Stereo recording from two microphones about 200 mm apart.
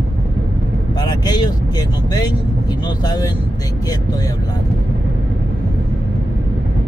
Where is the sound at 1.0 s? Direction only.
20° left (ahead or behind).